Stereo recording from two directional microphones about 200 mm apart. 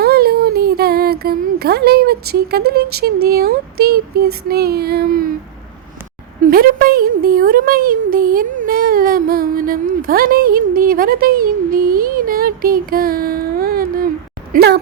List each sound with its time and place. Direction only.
0.0 s speech: 50° right (ahead or behind)
6.4 s speech: 45° right (ahead or behind)